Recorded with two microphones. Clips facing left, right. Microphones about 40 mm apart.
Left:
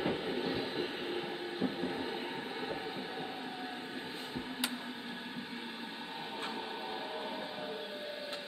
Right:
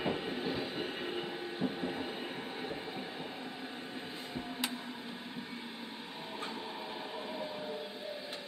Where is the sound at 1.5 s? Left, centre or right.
Centre.